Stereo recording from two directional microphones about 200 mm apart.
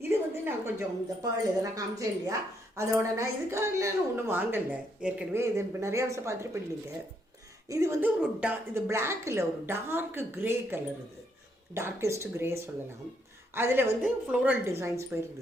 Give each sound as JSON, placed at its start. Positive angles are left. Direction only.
{"t": 0.1, "sound": "a woman's voice", "side_deg": -10}
{"t": 7.7, "sound": "a woman's voice", "side_deg": -15}